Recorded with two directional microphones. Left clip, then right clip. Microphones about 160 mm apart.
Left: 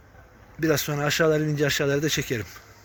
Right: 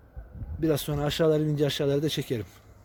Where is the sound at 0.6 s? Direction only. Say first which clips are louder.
Left 3 dB; 15° right (ahead or behind).